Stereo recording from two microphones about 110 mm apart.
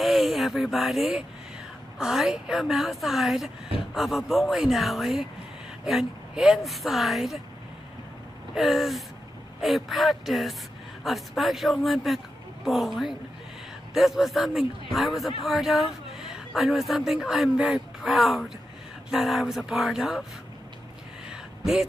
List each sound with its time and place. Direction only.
0.0 s speech: centre (ahead or behind)
8.5 s a woman's voice: centre (ahead or behind)
21.3 s a sound: 5° right (ahead or behind)